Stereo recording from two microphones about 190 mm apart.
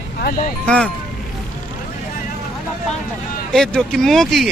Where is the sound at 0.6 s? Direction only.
5° left (ahead or behind).